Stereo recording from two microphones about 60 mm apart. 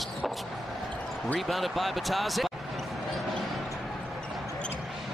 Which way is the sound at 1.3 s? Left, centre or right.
Centre.